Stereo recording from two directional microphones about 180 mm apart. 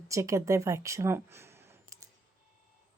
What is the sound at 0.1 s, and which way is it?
Speech, 15° right (ahead or behind).